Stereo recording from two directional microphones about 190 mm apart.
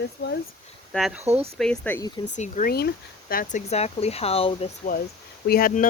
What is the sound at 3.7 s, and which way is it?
Speech, 35° left (ahead or behind).